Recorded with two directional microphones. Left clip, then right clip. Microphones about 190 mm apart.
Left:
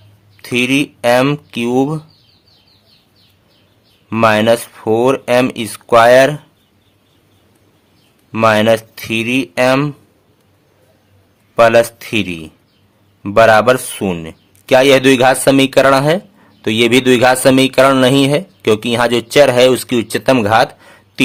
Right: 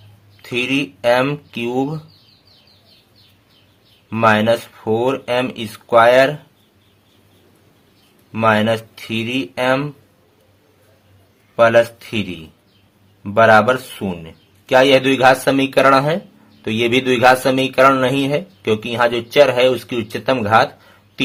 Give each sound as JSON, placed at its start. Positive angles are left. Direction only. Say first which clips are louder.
{"t": 0.4, "sound": "speech", "louder": "left 5 dB", "side_deg": 30}
{"t": 4.1, "sound": "speech", "louder": "left 3 dB", "side_deg": 30}
{"t": 8.3, "sound": "speech", "louder": "left 5 dB", "side_deg": 35}
{"t": 11.5, "sound": "speech", "louder": "left 3 dB", "side_deg": 35}